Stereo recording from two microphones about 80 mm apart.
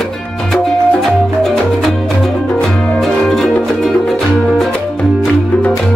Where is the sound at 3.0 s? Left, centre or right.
Centre.